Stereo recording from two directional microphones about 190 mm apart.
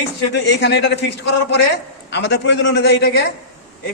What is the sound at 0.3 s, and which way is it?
A man's voice, 65° left (ahead or behind).